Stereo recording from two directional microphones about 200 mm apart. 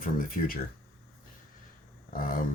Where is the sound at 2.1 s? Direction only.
45° left (ahead or behind).